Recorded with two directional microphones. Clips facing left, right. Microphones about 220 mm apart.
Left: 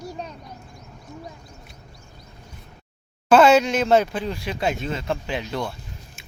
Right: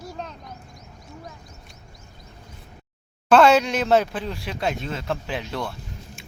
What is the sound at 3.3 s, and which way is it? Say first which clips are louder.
Speech: left 1 dB; centre (ahead or behind).